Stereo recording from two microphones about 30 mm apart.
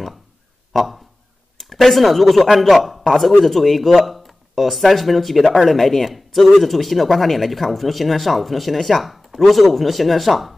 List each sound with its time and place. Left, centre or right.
0.7 s a man's voice: centre
9.0 s a sound: centre
9.4 s speech: centre